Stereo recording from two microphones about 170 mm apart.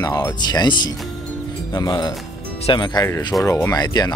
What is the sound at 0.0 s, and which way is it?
Speech, 20° left (ahead or behind).